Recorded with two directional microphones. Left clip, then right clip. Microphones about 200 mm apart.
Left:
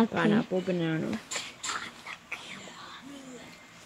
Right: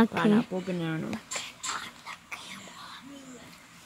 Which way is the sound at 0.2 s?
10° right (ahead or behind).